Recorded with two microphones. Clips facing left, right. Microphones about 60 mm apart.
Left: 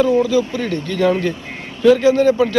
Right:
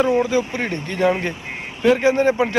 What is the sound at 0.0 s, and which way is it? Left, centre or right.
Speech, right.